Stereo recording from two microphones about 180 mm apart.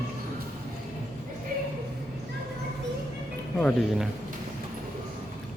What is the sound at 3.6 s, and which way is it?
Speech, 5° left (ahead or behind).